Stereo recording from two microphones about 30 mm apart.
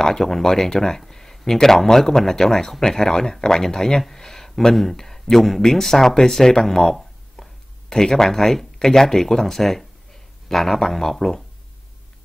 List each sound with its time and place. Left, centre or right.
0.0 s speech: centre
4.2 s a sound: centre
4.9 s speech: centre